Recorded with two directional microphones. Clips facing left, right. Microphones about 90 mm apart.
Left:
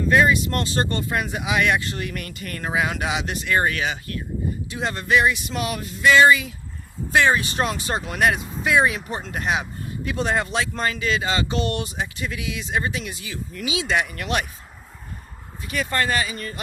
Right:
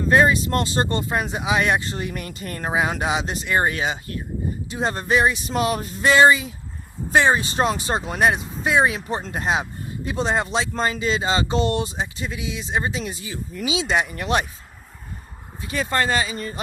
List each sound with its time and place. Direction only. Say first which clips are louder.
0.1 s speech: right 1 dB; 30° right (ahead or behind)
15.6 s speech: right 2 dB; 25° right (ahead or behind)